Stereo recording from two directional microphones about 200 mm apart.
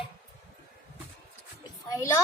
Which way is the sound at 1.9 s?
15° left (ahead or behind).